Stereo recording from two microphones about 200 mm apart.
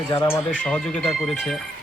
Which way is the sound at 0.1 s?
15° left (ahead or behind).